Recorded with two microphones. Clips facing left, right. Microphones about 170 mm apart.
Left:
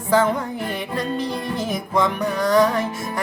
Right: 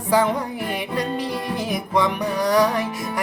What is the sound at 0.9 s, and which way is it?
Music, 15° right (ahead or behind).